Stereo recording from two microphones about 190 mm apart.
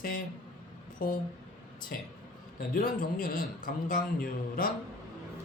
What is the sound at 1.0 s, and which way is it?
Speech, 50° left (ahead or behind).